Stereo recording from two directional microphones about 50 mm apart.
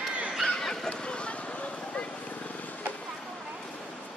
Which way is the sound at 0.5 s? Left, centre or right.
Centre.